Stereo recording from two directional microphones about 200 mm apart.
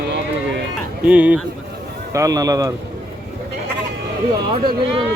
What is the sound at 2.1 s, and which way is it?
Speech, 15° right (ahead or behind).